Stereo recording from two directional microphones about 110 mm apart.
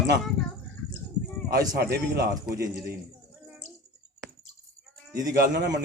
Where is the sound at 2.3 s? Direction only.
30° right (ahead or behind).